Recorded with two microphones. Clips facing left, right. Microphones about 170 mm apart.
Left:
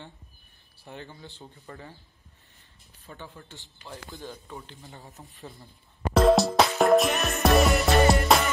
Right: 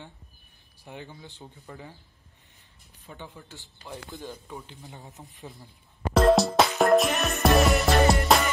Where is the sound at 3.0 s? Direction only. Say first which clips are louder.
Even; 15° right (ahead or behind).